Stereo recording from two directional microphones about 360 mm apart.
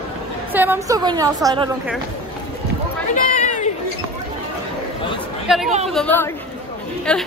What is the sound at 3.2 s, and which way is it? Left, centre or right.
Chatter, centre.